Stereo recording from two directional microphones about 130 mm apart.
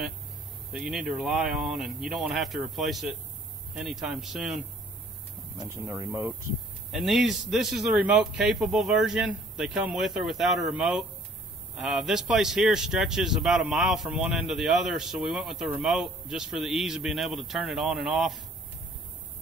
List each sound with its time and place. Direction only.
0.7 s speech: 5° right (ahead or behind)
5.6 s speech: 30° right (ahead or behind)
6.9 s speech: centre (ahead or behind)